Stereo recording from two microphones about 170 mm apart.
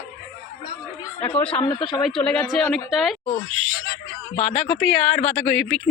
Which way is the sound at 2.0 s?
5° left (ahead or behind).